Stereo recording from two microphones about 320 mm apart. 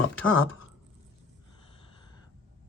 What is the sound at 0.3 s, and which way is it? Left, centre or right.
Speech, left.